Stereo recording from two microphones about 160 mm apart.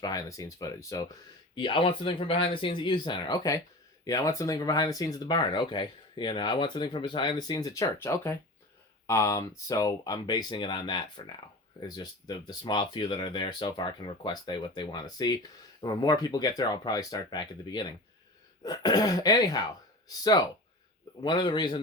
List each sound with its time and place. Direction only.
0.0 s speech: 20° left (ahead or behind)
1.5 s speech: 30° left (ahead or behind)